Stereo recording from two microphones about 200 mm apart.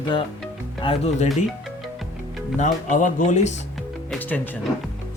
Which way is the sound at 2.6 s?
40° left (ahead or behind).